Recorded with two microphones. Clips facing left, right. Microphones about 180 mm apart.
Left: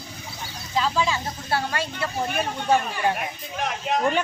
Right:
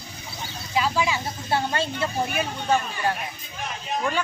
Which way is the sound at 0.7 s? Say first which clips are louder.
Even; 10° right (ahead or behind).